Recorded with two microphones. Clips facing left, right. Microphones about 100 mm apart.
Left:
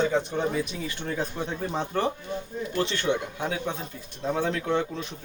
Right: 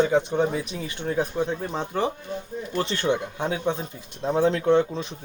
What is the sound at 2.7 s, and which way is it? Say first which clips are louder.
Speech: right 2 dB; 35° right (ahead or behind).